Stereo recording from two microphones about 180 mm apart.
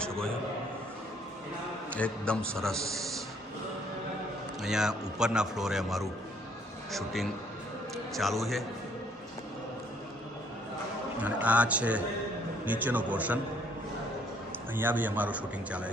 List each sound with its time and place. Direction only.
1.9 s a man's voice: 5° left (ahead or behind)
4.6 s a man's voice: 5° right (ahead or behind)
11.2 s a man's voice: 10° right (ahead or behind)
14.8 s a man's voice: 10° right (ahead or behind)